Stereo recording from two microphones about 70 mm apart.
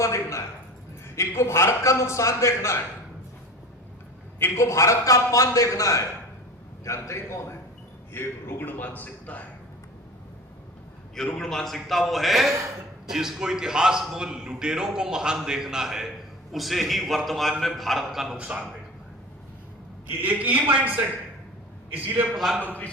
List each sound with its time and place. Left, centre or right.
0.0 s a man's voice: left
4.4 s a man's voice: left
4.6 s a man's voice: left
8.1 s a man's voice: left
11.3 s a man's voice: centre
18.3 s a man's voice: centre
20.1 s a man's voice: right
22.4 s a man's voice: centre
22.6 s a man's voice: left